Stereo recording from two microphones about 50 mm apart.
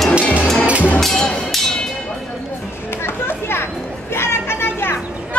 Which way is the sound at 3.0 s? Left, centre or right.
Left.